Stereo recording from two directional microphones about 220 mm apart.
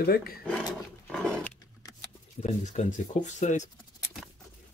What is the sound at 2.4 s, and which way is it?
Speech, 35° left (ahead or behind).